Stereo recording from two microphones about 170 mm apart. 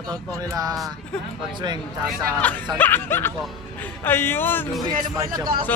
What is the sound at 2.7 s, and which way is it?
Speech, 10° left (ahead or behind).